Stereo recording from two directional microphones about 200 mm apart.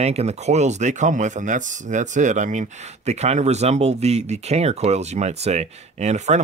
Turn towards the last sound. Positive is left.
turn(degrees=-35)  # may be behind; listen again after turning